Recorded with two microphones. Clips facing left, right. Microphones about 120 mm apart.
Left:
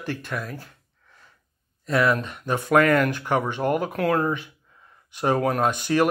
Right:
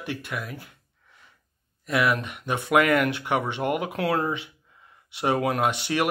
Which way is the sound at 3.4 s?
40° left (ahead or behind).